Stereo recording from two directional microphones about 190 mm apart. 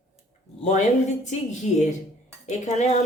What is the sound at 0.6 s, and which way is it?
A woman's voice, 35° left (ahead or behind).